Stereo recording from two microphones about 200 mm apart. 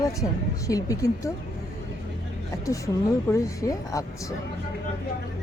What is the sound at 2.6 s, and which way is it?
A woman's voice, 15° left (ahead or behind).